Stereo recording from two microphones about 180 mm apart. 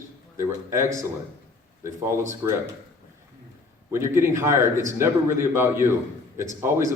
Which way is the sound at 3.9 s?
15° right (ahead or behind).